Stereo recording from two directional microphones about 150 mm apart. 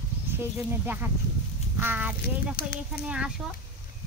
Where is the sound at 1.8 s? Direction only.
10° right (ahead or behind).